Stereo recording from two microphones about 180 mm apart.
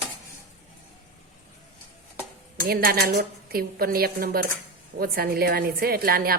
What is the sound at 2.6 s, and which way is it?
A woman's voice, 55° right (ahead or behind).